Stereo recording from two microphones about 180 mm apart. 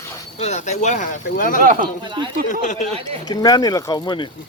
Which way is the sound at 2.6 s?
40° left (ahead or behind).